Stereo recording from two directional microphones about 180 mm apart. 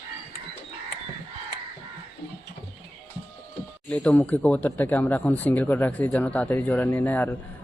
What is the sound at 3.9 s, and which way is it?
Speech, 5° left (ahead or behind).